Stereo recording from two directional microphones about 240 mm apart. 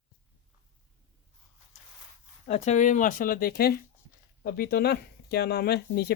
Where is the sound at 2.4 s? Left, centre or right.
Left.